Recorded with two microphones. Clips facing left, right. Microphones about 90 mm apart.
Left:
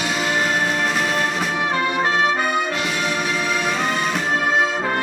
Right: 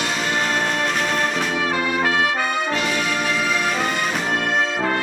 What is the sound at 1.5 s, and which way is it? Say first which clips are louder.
Brass instrument: left 1 dB; 20° left (ahead or behind).